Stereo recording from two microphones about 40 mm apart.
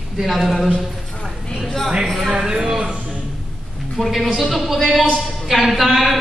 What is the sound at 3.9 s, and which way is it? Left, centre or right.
A man's voice, centre.